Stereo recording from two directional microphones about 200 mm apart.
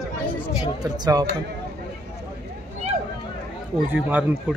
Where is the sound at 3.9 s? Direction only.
10° right (ahead or behind).